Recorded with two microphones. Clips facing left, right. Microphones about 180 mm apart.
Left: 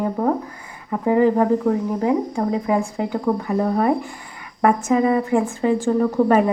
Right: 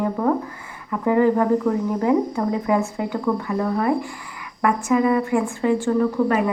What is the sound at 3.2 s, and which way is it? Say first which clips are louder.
Speech: left 2 dB; 25° left (ahead or behind).